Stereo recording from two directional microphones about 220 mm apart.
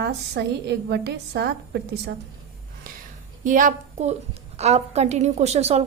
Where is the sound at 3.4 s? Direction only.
35° right (ahead or behind).